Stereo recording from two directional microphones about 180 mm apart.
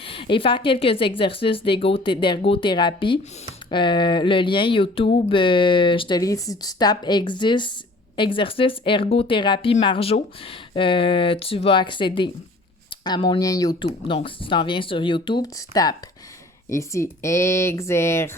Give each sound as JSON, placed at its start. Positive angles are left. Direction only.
{"t": 0.0, "sound": "speech", "side_deg": 30}